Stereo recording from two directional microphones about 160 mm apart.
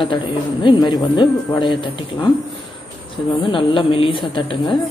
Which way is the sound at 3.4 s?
30° left (ahead or behind).